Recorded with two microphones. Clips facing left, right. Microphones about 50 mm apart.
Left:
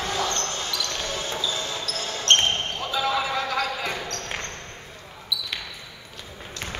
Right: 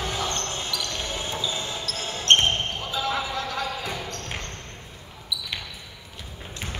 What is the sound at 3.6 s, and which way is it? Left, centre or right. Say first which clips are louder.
Basketball bounce: left 2 dB; left.